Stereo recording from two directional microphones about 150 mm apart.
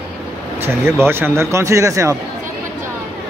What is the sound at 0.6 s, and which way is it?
Speech, 15° right (ahead or behind).